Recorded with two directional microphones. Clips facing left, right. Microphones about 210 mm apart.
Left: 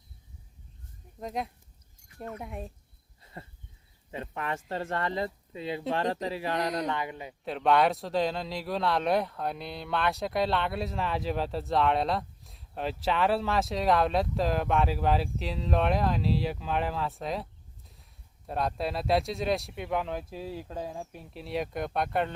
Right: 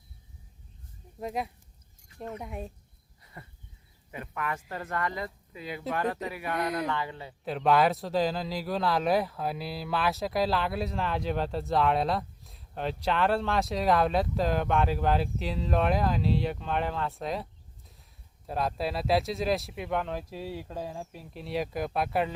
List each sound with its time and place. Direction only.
1.2 s speech: 5° right (ahead or behind)
3.3 s speech: 25° left (ahead or behind)
7.4 s speech: centre (ahead or behind)